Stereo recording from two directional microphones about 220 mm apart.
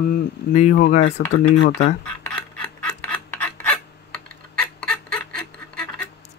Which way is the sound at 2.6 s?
5° left (ahead or behind).